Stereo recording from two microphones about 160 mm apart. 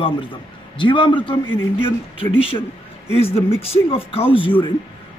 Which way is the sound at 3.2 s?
35° left (ahead or behind).